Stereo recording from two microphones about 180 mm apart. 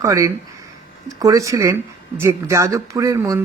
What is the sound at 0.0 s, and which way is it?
Speech, 15° right (ahead or behind).